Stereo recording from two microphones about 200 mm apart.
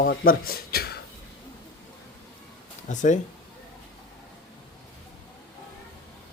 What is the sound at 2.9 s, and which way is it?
Speech, 35° left (ahead or behind).